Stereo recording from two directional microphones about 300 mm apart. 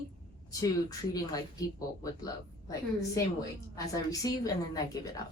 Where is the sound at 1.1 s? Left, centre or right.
Centre.